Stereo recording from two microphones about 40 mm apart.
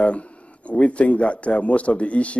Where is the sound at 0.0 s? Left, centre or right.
Left.